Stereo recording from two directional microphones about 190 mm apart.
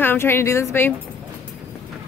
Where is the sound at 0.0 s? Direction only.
10° left (ahead or behind).